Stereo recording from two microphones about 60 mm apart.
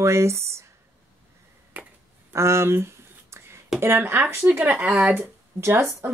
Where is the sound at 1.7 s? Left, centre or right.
Right.